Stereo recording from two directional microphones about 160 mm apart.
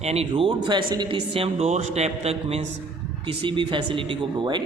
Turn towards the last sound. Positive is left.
turn(degrees=-30)  # may be behind; listen again after turning